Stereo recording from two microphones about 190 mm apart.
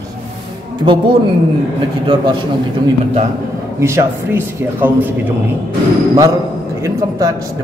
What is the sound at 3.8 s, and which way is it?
A man's voice, 15° right (ahead or behind).